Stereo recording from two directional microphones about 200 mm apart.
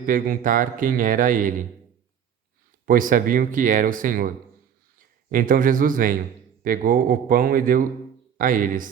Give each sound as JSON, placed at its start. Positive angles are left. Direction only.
{"t": 0.0, "sound": "speech", "side_deg": -45}
{"t": 2.8, "sound": "a man's voice", "side_deg": -40}